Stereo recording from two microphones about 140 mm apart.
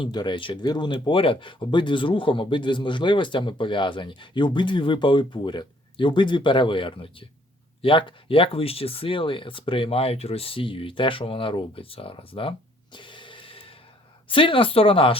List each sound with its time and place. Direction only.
0.0 s speech: 30° left (ahead or behind)